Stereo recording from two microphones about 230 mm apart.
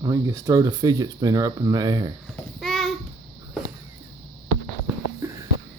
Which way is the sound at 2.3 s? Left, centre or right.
Centre.